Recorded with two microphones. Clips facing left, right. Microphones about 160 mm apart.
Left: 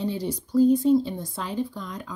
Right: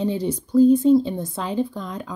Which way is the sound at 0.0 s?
20° right (ahead or behind).